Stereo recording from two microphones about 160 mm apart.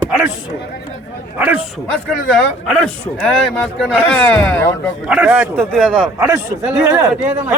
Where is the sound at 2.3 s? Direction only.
5° left (ahead or behind).